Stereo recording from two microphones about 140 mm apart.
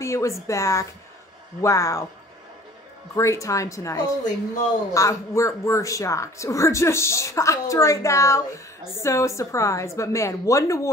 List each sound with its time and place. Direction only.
0.0 s speech: 20° left (ahead or behind)
3.2 s speech: 20° left (ahead or behind)